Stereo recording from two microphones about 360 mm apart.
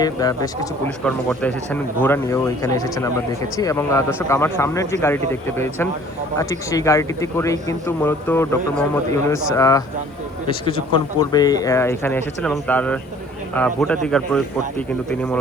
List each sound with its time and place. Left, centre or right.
0.0 s a man's voice: centre
11.2 s a man's voice: centre